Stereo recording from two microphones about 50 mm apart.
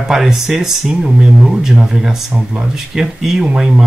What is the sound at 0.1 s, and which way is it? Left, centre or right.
Speech, centre.